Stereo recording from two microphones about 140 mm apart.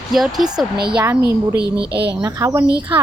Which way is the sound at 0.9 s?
15° right (ahead or behind).